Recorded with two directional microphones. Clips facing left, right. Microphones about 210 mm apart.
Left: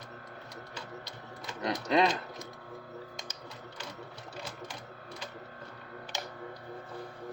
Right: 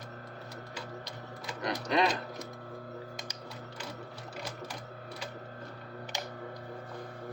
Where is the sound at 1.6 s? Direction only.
25° left (ahead or behind).